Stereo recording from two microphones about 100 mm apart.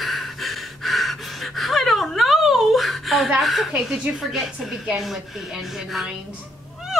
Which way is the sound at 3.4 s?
Centre (ahead or behind).